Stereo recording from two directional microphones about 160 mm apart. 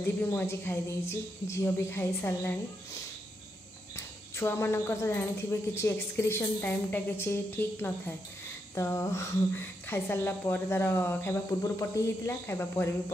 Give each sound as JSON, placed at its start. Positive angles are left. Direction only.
{"t": 0.0, "sound": "a woman's voice", "side_deg": 15}